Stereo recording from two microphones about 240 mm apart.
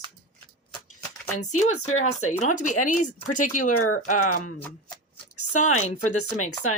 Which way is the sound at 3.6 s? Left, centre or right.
Left.